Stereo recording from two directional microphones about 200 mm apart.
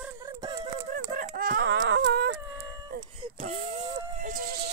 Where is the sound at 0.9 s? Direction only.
45° right (ahead or behind).